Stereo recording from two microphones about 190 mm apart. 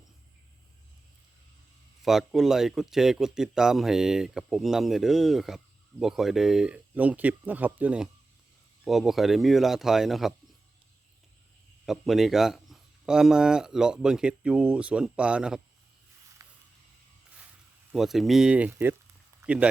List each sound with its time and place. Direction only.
2.0 s speech: centre (ahead or behind)
11.9 s speech: centre (ahead or behind)
16.4 s mechanisms: 15° right (ahead or behind)
17.9 s speech: centre (ahead or behind)